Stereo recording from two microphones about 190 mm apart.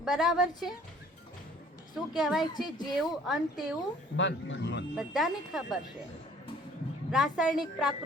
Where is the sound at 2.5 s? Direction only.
20° left (ahead or behind).